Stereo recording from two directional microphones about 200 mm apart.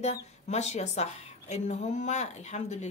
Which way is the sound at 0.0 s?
35° left (ahead or behind).